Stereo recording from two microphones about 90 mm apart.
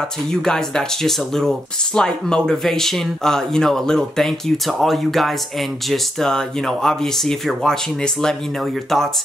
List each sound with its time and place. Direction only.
0.3 s speech: 5° left (ahead or behind)